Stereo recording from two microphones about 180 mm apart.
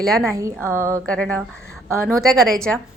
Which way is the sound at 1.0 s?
5° left (ahead or behind).